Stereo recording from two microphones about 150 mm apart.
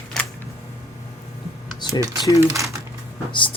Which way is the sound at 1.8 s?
30° left (ahead or behind).